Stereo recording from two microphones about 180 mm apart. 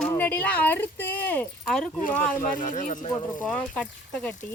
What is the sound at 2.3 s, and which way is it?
Speech, 45° left (ahead or behind).